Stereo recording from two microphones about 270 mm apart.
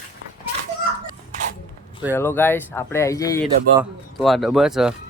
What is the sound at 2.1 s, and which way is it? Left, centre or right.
Speech, centre.